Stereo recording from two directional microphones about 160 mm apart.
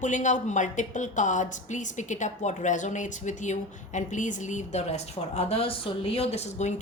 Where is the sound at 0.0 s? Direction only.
50° left (ahead or behind).